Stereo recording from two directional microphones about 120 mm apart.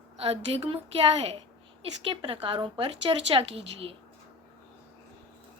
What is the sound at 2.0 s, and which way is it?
A woman's voice, 50° right (ahead or behind).